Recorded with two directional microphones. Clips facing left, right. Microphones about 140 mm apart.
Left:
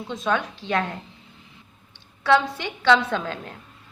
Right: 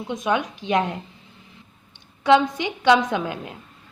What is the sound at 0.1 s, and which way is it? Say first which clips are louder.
Speech: right 2 dB; 15° right (ahead or behind).